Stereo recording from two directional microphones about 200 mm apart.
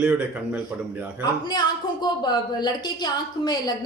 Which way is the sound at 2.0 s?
20° left (ahead or behind).